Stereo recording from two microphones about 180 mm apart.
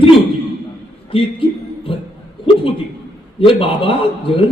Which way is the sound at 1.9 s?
30° left (ahead or behind).